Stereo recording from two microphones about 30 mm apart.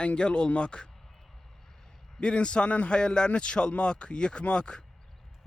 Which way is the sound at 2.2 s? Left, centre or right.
Left.